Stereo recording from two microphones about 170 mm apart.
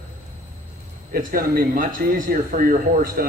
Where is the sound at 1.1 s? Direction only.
60° right (ahead or behind).